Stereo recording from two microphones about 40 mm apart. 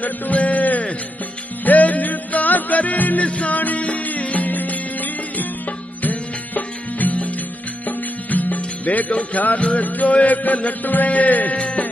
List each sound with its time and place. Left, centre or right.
0.0 s music: left
6.0 s music: left
11.5 s speech: left